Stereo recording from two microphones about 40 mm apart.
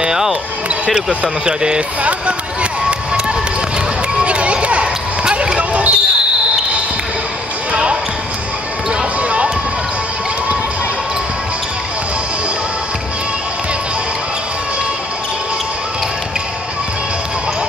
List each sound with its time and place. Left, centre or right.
0.0 s basketball bounce: centre
1.2 s speech: right
2.0 s run: right
4.2 s a sound: right
7.7 s basketball bounce: right
9.2 s a sound: right